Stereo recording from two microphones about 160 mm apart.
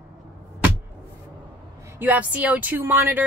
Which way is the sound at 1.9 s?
10° right (ahead or behind).